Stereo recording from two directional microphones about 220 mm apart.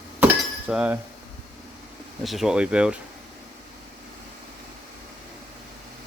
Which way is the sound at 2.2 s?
Centre (ahead or behind).